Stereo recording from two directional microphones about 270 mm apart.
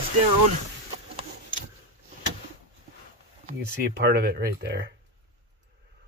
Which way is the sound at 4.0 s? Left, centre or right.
Right.